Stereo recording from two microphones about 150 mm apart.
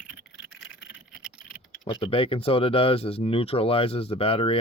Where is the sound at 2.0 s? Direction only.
35° left (ahead or behind).